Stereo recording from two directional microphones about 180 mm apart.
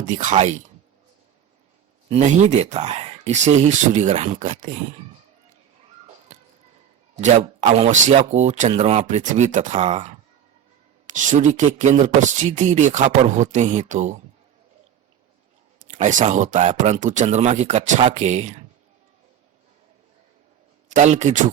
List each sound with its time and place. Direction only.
0.1 s speech: 45° right (ahead or behind)
2.0 s speech: 40° right (ahead or behind)
7.2 s speech: 40° right (ahead or behind)
15.8 s speech: 45° right (ahead or behind)
20.9 s speech: 40° right (ahead or behind)